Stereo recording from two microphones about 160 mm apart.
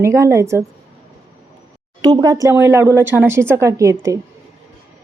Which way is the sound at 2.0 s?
25° right (ahead or behind).